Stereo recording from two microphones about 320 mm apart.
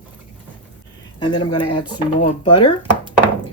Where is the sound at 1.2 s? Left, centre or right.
Centre.